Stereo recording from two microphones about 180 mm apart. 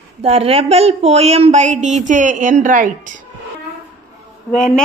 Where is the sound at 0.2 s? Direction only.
35° right (ahead or behind).